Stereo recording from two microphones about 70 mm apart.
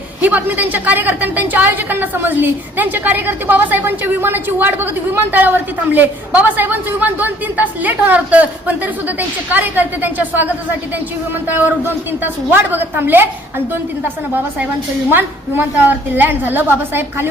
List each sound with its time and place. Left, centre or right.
0.2 s a woman's voice: right
15.1 s a woman's voice: right